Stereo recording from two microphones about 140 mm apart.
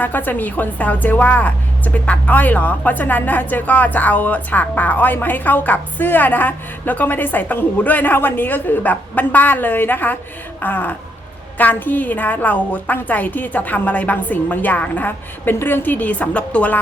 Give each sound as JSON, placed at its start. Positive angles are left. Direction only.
{"t": 0.0, "sound": "a woman's voice", "side_deg": 10}